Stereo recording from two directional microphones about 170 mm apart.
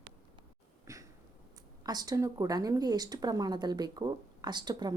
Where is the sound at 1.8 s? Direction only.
20° right (ahead or behind).